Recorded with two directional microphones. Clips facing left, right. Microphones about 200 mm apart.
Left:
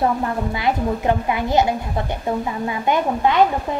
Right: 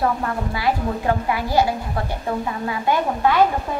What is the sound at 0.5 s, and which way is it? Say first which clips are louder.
A woman's voice: even; 20° left (ahead or behind).